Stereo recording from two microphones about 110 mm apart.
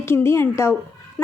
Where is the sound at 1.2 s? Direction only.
15° left (ahead or behind).